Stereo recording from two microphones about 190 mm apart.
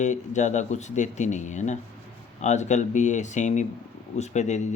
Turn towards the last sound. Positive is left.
turn(degrees=40)  # may be behind; listen again after turning